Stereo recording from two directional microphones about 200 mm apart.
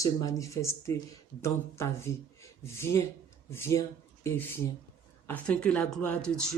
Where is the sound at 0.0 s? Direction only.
15° left (ahead or behind).